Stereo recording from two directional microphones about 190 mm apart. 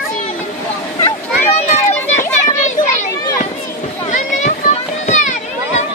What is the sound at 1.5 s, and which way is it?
Children playing, 35° left (ahead or behind).